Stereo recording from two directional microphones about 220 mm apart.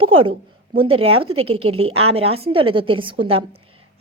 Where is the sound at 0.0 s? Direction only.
25° right (ahead or behind).